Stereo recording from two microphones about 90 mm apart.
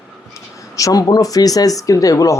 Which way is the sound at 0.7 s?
40° left (ahead or behind).